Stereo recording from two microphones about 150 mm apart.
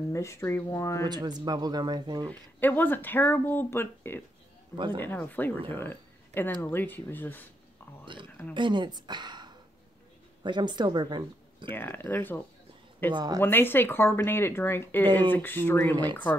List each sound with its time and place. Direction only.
0.1 s speech: 20° left (ahead or behind)
1.0 s speech: 30° right (ahead or behind)
2.6 s speech: 15° left (ahead or behind)
4.7 s speech: 30° right (ahead or behind)
5.0 s speech: 10° left (ahead or behind)
8.0 s speech: 35° right (ahead or behind)
11.7 s speech: 15° left (ahead or behind)
13.1 s speech: 25° right (ahead or behind)
13.4 s speech: 15° left (ahead or behind)